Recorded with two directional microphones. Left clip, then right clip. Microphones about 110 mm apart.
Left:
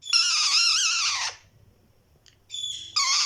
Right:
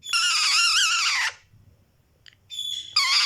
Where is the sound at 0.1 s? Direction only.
35° left (ahead or behind).